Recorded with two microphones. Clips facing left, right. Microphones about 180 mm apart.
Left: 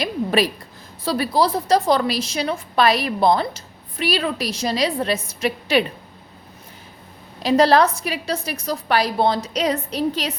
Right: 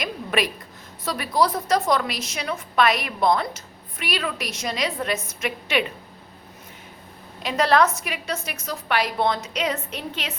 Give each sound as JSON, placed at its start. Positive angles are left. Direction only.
{"t": 0.0, "sound": "a sound", "side_deg": 35}
{"t": 1.0, "sound": "a woman's voice", "side_deg": 30}
{"t": 7.4, "sound": "a woman's voice", "side_deg": 35}